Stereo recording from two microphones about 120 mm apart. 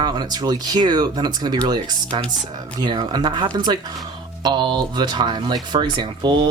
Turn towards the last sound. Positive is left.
turn(degrees=-40)  # may be behind; listen again after turning